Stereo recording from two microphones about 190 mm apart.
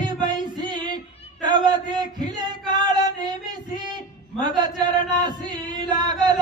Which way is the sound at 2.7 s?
20° right (ahead or behind).